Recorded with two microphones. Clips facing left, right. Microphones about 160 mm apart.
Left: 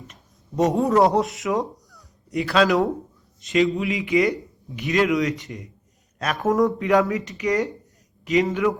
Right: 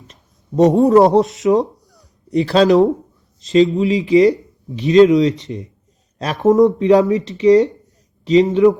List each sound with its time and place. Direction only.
0.8 s a man's voice: 20° right (ahead or behind)